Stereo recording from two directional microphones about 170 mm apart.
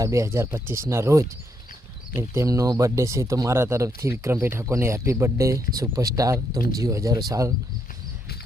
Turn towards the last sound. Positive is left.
turn(degrees=-20)  # may be behind; listen again after turning